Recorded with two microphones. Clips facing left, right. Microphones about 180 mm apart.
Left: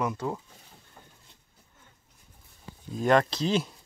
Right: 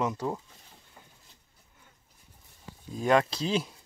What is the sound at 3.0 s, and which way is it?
Speech, 5° right (ahead or behind).